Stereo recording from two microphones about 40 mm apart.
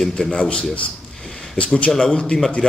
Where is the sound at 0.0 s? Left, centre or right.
Centre.